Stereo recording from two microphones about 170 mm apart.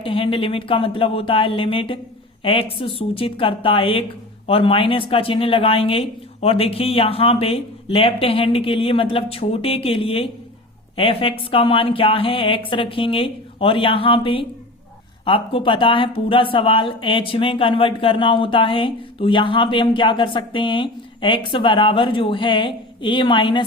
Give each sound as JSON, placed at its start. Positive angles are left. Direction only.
{"t": 0.0, "sound": "speech", "side_deg": 30}